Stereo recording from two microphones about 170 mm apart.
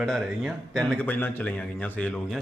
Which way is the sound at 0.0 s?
Centre (ahead or behind).